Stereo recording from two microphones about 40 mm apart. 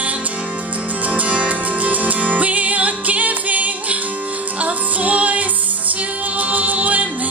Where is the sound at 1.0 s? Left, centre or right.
Right.